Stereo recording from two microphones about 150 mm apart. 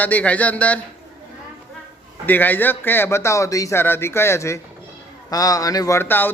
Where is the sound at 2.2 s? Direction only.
10° left (ahead or behind).